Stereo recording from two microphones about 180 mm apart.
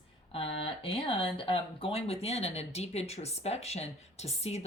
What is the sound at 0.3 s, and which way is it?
Speech, 30° left (ahead or behind).